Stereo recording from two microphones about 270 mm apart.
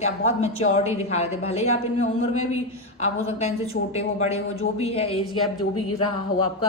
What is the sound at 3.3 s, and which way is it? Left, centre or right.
A woman's voice, left.